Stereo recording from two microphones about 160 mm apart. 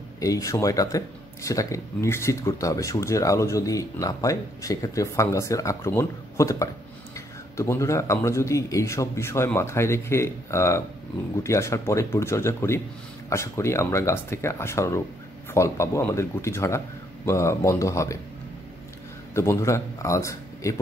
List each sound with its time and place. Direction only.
0.2 s speech: 20° left (ahead or behind)
19.3 s a man's voice: 15° left (ahead or behind)